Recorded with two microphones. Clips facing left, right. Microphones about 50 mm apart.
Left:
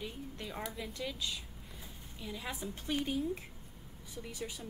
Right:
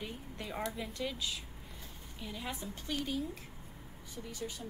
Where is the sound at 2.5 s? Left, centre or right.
Centre.